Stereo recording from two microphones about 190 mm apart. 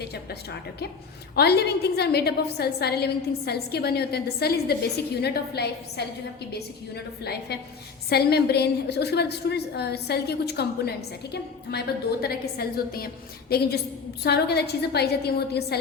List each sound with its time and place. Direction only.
0.0 s a woman's voice: 60° left (ahead or behind)
1.4 s a woman's voice: 60° left (ahead or behind)